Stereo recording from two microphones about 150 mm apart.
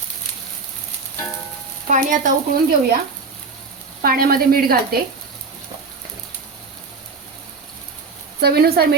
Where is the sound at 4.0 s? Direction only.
80° right.